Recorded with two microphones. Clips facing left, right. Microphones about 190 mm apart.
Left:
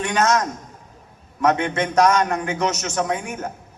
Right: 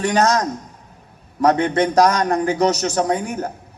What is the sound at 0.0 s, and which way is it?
A man's voice, 35° right (ahead or behind).